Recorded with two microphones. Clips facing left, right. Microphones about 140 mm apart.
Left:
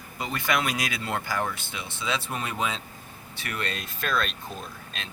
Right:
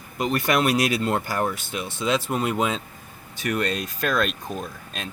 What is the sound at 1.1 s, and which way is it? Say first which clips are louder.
Speech: right 4 dB; 40° right (ahead or behind).